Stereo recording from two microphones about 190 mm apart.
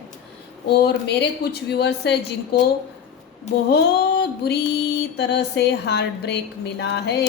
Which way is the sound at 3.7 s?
60° left (ahead or behind).